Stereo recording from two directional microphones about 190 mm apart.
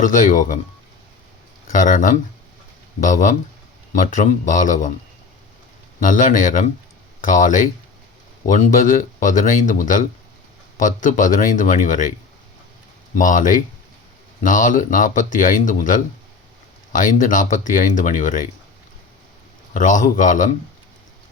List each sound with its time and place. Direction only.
0.0 s speech: 40° left (ahead or behind)
1.7 s speech: 45° left (ahead or behind)
6.0 s speech: 45° left (ahead or behind)
13.1 s speech: 45° left (ahead or behind)
19.7 s speech: 40° left (ahead or behind)